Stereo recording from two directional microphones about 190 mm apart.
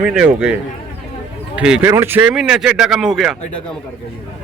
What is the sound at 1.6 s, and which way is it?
Speech, 5° right (ahead or behind).